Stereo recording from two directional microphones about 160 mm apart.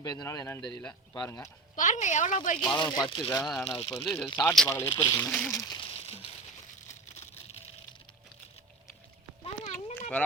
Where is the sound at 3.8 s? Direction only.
35° left (ahead or behind).